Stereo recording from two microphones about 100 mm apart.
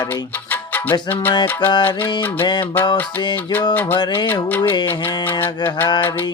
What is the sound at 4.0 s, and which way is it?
Music, 45° left (ahead or behind).